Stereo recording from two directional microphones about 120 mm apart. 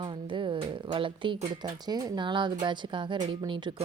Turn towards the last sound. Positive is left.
turn(degrees=-40)  # may be behind; listen again after turning